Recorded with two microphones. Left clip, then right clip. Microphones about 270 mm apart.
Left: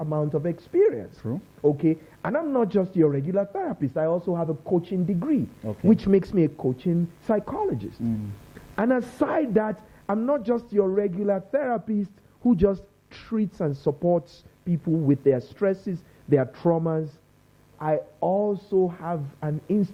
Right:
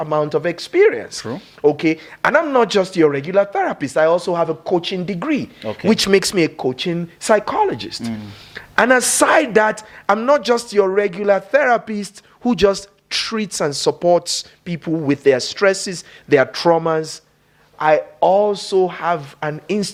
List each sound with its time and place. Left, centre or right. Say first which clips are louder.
0.0 s speech: right 9 dB; centre
18.2 s speech: right 9 dB; right
18.9 s speech: right 11 dB; centre